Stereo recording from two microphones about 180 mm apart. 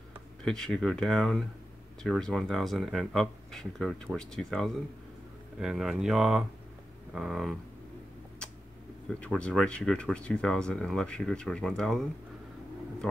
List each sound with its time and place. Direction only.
0.4 s speech: 5° left (ahead or behind)
9.2 s speech: 5° left (ahead or behind)